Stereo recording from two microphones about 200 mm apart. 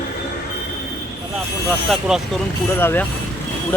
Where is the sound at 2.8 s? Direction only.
10° left (ahead or behind).